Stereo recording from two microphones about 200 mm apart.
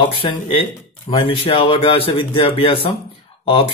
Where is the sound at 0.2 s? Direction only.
25° left (ahead or behind).